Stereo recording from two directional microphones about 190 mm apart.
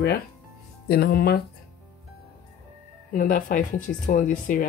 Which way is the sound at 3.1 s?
45° left (ahead or behind).